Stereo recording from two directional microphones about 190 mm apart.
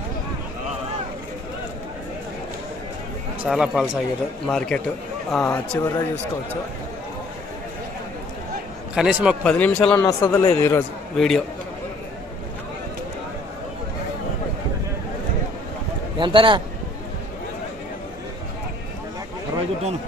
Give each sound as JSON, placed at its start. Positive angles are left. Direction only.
{"t": 3.4, "sound": "speech", "side_deg": -5}
{"t": 8.9, "sound": "speech", "side_deg": -5}
{"t": 16.2, "sound": "speech", "side_deg": -25}